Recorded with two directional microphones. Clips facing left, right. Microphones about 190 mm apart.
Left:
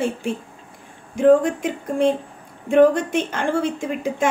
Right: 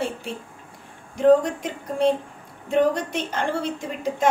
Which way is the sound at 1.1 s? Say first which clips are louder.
Left 2 dB; 50° left (ahead or behind).